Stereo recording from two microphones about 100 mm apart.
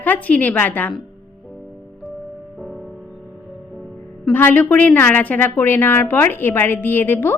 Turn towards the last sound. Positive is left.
turn(degrees=20)  # may be behind; listen again after turning